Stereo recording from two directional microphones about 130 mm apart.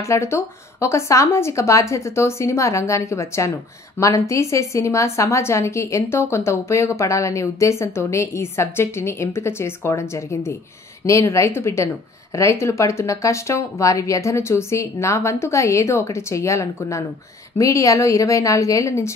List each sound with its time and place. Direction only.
0.0 s a woman's voice: 20° left (ahead or behind)